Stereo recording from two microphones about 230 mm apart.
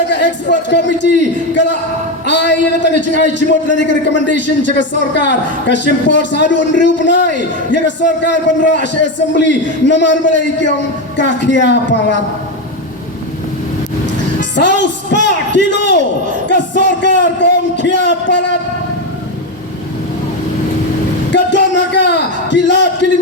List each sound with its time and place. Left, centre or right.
0.1 s a woman's voice: left
14.5 s a man's voice: left
21.3 s a sound: left